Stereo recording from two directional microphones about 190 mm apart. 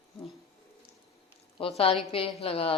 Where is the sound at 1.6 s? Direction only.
30° left (ahead or behind).